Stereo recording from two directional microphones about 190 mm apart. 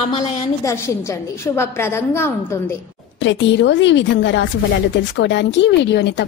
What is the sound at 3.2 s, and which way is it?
A woman's voice, 70° left (ahead or behind).